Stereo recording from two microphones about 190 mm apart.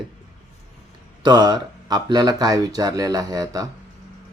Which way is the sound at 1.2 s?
20° right (ahead or behind).